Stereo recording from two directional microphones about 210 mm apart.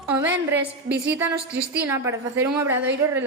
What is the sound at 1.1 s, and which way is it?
A woman's voice, 10° right (ahead or behind).